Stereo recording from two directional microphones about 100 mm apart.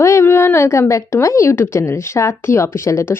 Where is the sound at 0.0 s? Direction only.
25° left (ahead or behind).